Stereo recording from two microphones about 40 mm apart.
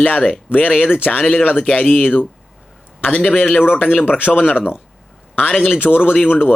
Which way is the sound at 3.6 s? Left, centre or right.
Left.